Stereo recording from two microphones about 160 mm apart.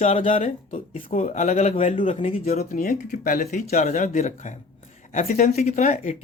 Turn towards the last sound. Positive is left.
turn(degrees=50)  # may be behind; listen again after turning